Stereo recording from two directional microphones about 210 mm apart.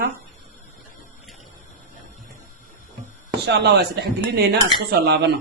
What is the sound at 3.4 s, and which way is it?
Speech, 50° right (ahead or behind).